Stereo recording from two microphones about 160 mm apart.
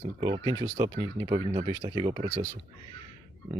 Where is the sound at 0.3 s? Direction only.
30° right (ahead or behind).